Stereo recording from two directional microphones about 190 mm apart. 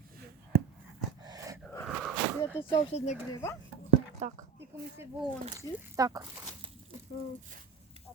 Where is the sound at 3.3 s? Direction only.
15° left (ahead or behind).